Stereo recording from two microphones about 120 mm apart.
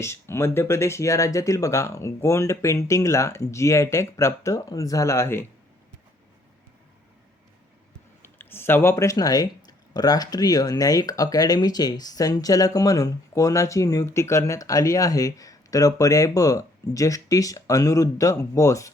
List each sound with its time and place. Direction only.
0.0 s speech: 20° left (ahead or behind)
8.2 s speech: 20° left (ahead or behind)